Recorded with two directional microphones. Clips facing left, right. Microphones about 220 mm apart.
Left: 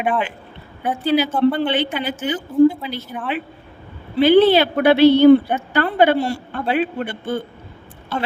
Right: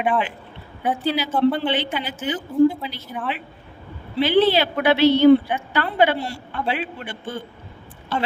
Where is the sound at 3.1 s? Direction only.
60° left (ahead or behind).